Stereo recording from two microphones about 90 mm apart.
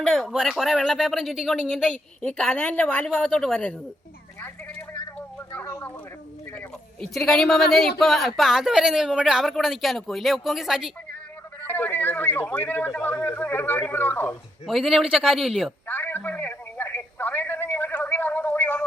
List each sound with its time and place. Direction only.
0.0 s speech: 5° left (ahead or behind)
1.9 s a woman's voice: 10° left (ahead or behind)
7.1 s speech: 5° left (ahead or behind)
11.6 s speech: 20° left (ahead or behind)
14.7 s speech: centre (ahead or behind)
15.9 s telephone: 20° left (ahead or behind)